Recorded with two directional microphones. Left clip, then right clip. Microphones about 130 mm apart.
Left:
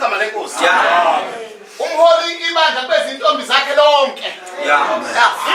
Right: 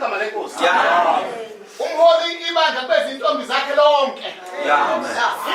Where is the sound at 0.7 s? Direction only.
25° right (ahead or behind).